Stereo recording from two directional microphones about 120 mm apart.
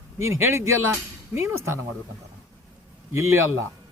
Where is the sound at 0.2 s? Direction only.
20° right (ahead or behind).